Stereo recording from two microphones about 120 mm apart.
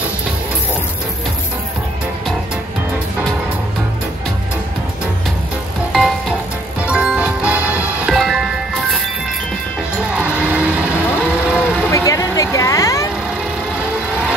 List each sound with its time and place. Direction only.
6.9 s music: 10° right (ahead or behind)
9.9 s music: 10° right (ahead or behind)
11.1 s a sound: 10° right (ahead or behind)
11.9 s vehicle: 25° left (ahead or behind)
13.7 s music: 10° right (ahead or behind)